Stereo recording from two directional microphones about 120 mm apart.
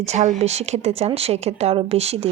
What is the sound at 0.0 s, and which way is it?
A woman's voice, 75° right (ahead or behind).